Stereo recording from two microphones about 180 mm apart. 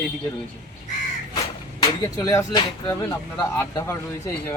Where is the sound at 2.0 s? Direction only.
20° left (ahead or behind).